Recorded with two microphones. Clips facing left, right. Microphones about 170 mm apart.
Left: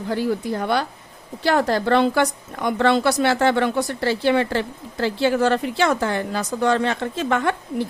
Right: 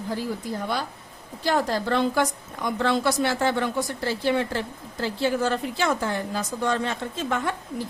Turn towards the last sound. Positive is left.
turn(degrees=70)  # may be behind; listen again after turning